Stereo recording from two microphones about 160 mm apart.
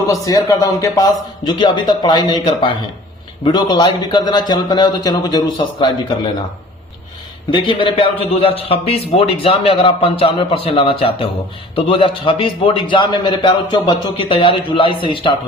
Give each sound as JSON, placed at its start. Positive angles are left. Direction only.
{"t": 0.1, "sound": "speech", "side_deg": 20}
{"t": 7.5, "sound": "a man's voice", "side_deg": 30}